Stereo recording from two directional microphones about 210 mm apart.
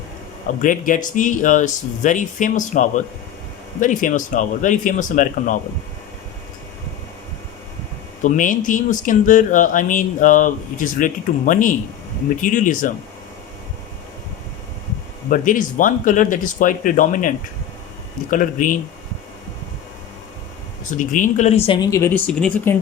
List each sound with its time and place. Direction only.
0.4 s speech: 40° left (ahead or behind)
8.2 s speech: 40° left (ahead or behind)
15.3 s speech: 40° left (ahead or behind)
21.0 s speech: 40° left (ahead or behind); by 22.7 s 5° left (ahead or behind)